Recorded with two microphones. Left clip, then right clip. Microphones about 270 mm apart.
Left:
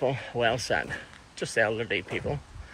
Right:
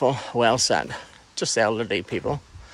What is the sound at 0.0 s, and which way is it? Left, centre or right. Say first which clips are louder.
Speech: right 6 dB; right.